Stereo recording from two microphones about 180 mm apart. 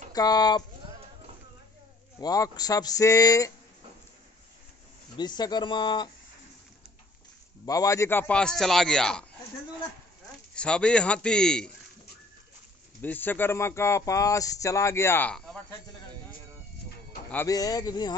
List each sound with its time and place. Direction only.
0.1 s speech: 20° left (ahead or behind)
2.1 s speech: 20° left (ahead or behind)
5.1 s speech: 25° left (ahead or behind)
7.6 s a man's voice: 20° left (ahead or behind)
10.5 s a man's voice: 5° left (ahead or behind)
13.0 s speech: 10° left (ahead or behind)
17.3 s speech: 15° left (ahead or behind)